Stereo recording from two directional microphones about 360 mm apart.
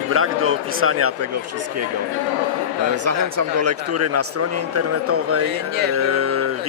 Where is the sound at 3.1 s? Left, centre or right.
Right.